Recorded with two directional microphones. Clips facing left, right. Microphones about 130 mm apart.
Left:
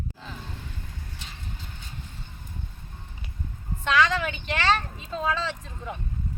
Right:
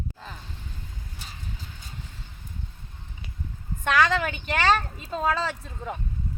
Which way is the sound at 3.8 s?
45° right (ahead or behind).